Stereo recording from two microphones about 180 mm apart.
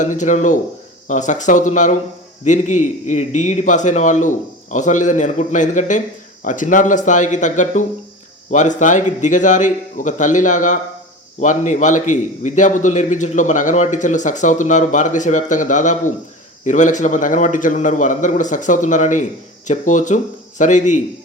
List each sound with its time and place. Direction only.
0.0 s a man's voice: 45° left (ahead or behind)